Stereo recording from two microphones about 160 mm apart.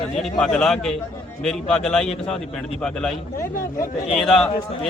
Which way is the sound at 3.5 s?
60° left (ahead or behind).